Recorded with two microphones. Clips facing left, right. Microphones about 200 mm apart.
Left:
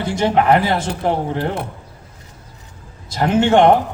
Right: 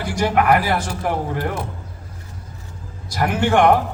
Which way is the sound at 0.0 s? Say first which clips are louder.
Left 2 dB; 25° left (ahead or behind).